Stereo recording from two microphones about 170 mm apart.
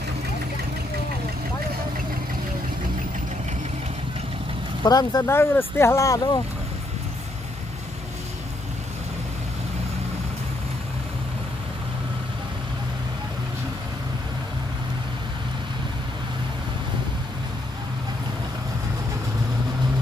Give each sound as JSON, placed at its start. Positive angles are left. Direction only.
{"t": 4.8, "sound": "speech", "side_deg": 20}